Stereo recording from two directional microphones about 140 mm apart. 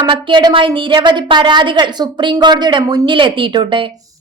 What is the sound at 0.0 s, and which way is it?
A woman's voice, 35° right (ahead or behind).